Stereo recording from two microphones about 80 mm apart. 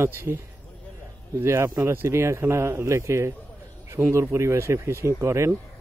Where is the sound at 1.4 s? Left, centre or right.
Right.